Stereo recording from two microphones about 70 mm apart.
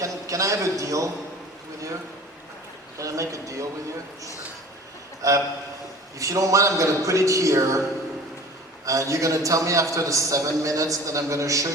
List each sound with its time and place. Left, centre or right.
0.0 s a sound: right
3.0 s a man's voice: right
5.2 s a man's voice: right
8.8 s a man's voice: right